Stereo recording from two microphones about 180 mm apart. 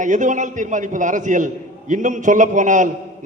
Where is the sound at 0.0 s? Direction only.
45° right (ahead or behind).